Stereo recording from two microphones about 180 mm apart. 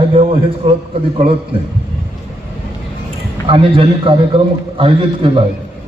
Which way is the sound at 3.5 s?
30° right (ahead or behind).